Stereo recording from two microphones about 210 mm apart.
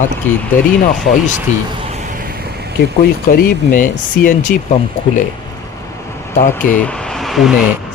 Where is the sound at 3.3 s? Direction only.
40° left (ahead or behind).